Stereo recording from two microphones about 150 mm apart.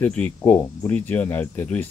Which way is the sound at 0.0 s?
10° left (ahead or behind).